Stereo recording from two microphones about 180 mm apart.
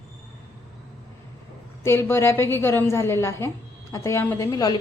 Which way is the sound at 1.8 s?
15° left (ahead or behind).